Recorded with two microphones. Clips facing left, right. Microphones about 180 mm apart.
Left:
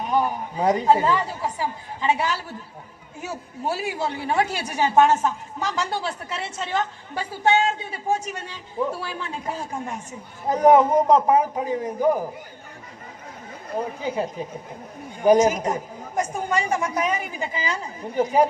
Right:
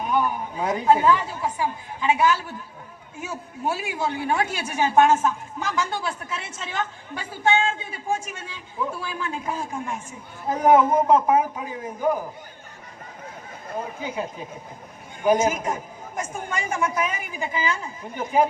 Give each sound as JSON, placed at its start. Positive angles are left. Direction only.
{"t": 0.6, "sound": "a woman's voice", "side_deg": 35}
{"t": 14.0, "sound": "a woman's voice", "side_deg": 35}